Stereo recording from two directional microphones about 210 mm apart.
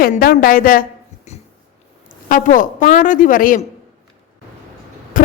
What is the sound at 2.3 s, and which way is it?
A man's voice, 40° left (ahead or behind).